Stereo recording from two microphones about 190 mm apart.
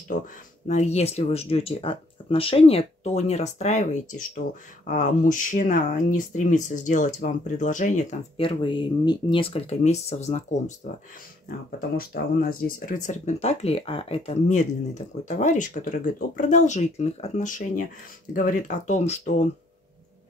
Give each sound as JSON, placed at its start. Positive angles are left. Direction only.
{"t": 0.7, "sound": "speech", "side_deg": 35}
{"t": 8.4, "sound": "speech", "side_deg": 25}
{"t": 12.0, "sound": "speech", "side_deg": 50}